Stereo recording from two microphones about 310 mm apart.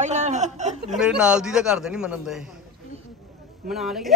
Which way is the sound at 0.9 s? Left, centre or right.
Centre.